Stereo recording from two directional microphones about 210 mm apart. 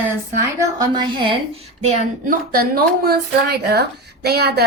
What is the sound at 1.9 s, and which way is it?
A woman's voice, 35° right (ahead or behind).